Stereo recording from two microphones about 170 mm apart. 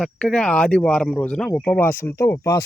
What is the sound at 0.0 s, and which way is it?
Speech, 5° left (ahead or behind).